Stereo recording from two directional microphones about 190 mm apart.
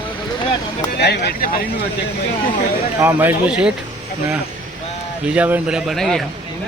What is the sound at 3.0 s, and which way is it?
Speech, 10° right (ahead or behind).